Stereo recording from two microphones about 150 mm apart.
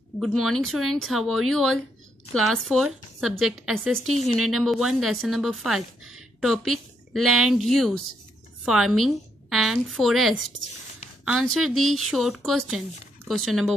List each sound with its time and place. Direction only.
0.2 s a woman's voice: centre (ahead or behind)